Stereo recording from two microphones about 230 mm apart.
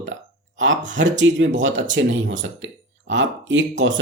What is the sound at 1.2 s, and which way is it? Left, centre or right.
Speech, right.